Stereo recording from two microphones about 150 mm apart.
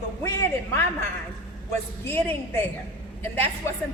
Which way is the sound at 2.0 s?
15° left (ahead or behind).